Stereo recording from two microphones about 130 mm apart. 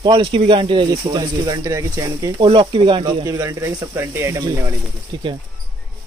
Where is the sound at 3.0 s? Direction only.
25° right (ahead or behind).